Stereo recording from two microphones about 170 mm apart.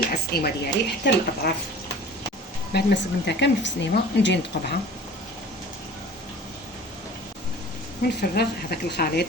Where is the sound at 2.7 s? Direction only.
90° left.